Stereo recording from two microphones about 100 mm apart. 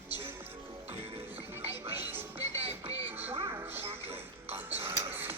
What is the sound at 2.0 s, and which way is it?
Music, 20° right (ahead or behind).